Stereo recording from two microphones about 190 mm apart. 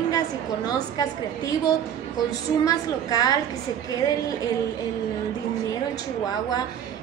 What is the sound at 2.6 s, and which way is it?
Speech, 20° left (ahead or behind).